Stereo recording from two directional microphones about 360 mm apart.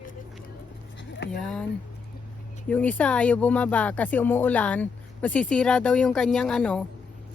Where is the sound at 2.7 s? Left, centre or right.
Centre.